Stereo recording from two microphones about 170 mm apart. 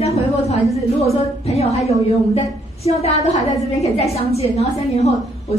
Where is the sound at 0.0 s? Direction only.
40° left (ahead or behind).